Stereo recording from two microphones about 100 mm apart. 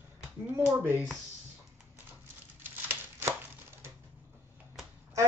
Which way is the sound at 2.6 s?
20° right (ahead or behind).